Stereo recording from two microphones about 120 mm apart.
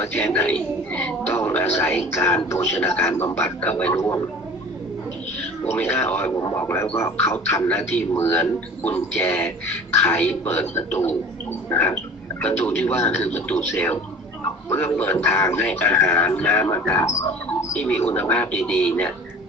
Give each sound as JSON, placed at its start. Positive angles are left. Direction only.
{"t": 0.0, "sound": "a man's voice", "side_deg": 15}
{"t": 5.7, "sound": "a man's voice", "side_deg": 20}